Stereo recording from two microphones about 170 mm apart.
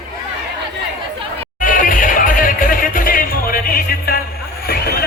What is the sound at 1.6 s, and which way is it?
Music, 55° left (ahead or behind).